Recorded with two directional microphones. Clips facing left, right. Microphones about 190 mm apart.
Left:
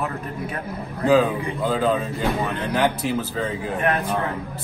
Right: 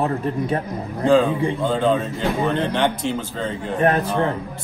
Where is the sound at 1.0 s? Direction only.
5° left (ahead or behind).